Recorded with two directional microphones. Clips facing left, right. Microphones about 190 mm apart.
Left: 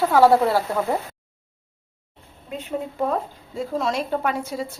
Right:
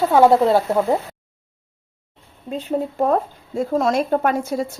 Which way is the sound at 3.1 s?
50° right (ahead or behind).